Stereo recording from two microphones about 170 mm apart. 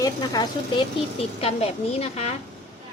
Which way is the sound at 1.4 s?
35° left (ahead or behind).